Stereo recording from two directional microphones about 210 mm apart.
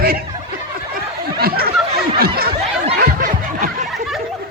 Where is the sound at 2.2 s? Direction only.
45° right (ahead or behind).